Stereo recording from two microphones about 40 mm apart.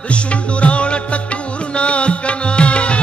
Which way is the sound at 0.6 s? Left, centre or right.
Left.